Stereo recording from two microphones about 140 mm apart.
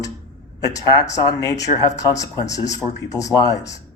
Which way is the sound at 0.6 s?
25° left (ahead or behind).